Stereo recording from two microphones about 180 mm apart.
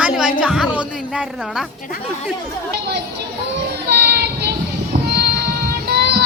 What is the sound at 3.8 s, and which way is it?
Child singing, 65° right (ahead or behind).